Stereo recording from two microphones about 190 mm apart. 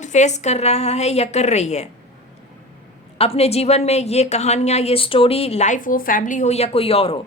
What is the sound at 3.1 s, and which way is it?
A woman's voice, 30° left (ahead or behind).